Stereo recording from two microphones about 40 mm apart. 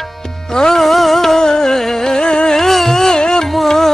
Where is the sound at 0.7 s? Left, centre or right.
Centre; by 2.6 s left.